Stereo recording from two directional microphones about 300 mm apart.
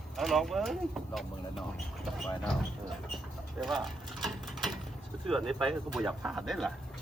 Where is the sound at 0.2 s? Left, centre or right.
Centre.